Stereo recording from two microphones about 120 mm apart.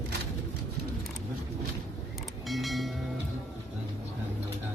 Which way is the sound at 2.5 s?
Centre (ahead or behind).